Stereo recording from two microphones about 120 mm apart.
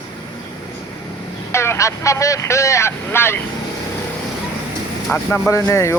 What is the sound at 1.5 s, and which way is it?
Speech, 20° left (ahead or behind).